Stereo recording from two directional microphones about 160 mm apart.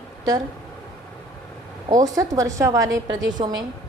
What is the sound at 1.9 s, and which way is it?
A woman's voice, 20° right (ahead or behind).